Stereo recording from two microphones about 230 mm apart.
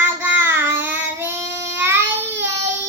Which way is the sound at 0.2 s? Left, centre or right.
Centre.